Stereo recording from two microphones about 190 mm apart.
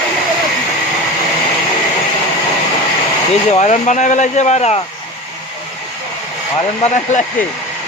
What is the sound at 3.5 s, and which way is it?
Speech, 40° left (ahead or behind).